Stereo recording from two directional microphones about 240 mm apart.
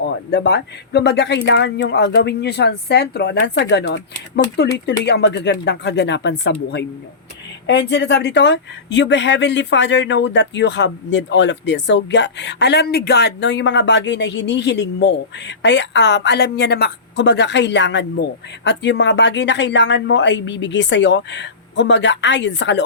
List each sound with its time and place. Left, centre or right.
0.0 s speech: left